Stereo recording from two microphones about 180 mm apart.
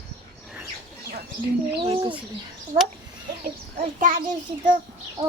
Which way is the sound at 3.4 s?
50° right (ahead or behind).